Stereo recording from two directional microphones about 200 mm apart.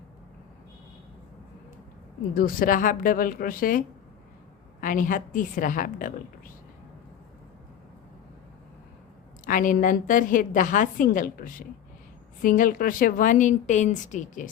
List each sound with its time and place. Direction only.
2.3 s a woman's voice: 45° left (ahead or behind)
9.5 s a woman's voice: 40° left (ahead or behind)